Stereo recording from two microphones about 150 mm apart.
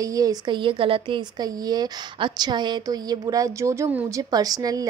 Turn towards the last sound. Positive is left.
turn(degrees=-25)  # may be behind; listen again after turning